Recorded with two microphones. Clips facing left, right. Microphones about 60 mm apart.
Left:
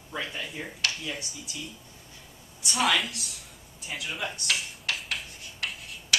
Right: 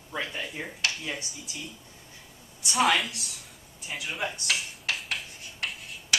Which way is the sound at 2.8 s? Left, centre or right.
Centre.